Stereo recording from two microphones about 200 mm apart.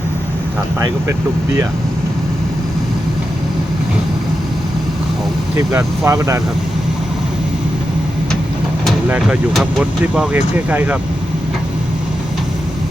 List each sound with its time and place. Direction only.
6.1 s speech: 15° right (ahead or behind)
9.0 s speech: 5° right (ahead or behind)